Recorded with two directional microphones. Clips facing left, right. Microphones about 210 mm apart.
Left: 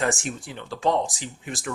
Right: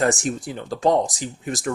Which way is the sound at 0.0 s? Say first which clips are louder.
Right 5 dB; 40° right (ahead or behind).